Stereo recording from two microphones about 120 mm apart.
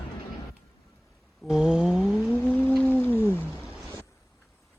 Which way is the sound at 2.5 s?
15° left (ahead or behind).